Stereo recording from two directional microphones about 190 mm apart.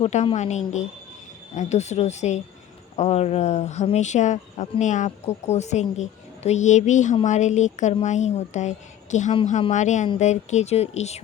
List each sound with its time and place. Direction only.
0.0 s speech: 35° left (ahead or behind)